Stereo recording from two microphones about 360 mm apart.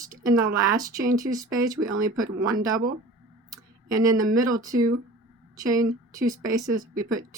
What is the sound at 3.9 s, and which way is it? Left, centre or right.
Speech, centre.